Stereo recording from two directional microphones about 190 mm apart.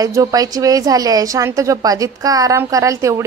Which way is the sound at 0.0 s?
20° right (ahead or behind).